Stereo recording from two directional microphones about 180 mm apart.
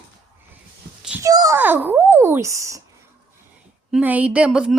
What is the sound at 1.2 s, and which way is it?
A child's voice, 20° right (ahead or behind).